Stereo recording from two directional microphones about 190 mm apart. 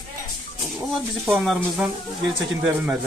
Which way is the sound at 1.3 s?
Centre (ahead or behind).